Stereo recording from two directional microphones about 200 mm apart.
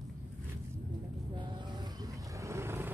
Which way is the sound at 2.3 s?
15° right (ahead or behind).